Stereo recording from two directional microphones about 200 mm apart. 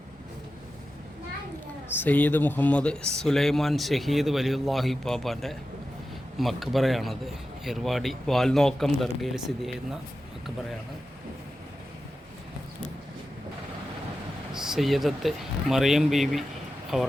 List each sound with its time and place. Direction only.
2.0 s speech: 10° left (ahead or behind)
14.5 s speech: centre (ahead or behind)